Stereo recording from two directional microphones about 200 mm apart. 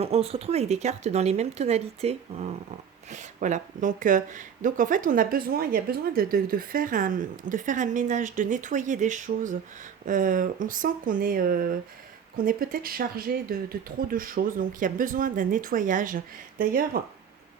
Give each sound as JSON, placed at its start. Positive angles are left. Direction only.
{"t": 0.0, "sound": "speech", "side_deg": -30}